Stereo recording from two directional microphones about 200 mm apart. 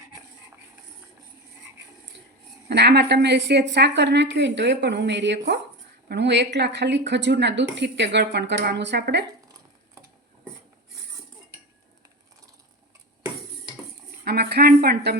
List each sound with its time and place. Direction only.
2.6 s a woman's voice: 55° right (ahead or behind)
14.3 s a woman's voice: 55° right (ahead or behind)